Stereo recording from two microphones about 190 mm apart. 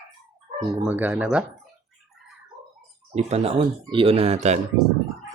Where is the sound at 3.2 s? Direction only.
35° right (ahead or behind).